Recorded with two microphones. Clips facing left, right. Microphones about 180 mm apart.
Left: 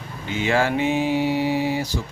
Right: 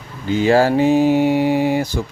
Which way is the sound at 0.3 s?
35° right (ahead or behind).